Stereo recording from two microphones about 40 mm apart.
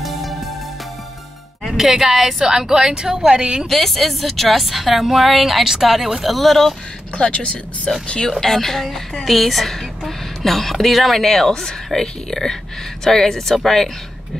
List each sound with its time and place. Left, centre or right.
0.0 s music: centre
1.7 s a woman's voice: centre
3.6 s a woman's voice: centre
6.3 s a woman's voice: centre
7.2 s speech: left
8.3 s a woman's voice: centre